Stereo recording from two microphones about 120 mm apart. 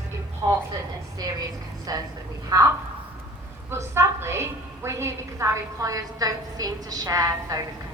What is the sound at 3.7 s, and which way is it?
A woman's voice, 20° right (ahead or behind).